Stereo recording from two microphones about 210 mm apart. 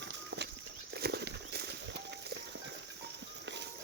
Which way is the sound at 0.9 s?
50° right (ahead or behind).